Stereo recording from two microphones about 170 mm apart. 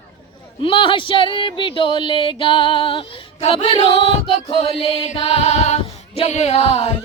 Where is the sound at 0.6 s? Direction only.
30° left (ahead or behind).